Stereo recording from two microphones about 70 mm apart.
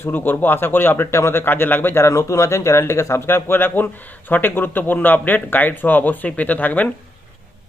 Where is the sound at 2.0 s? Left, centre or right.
Left.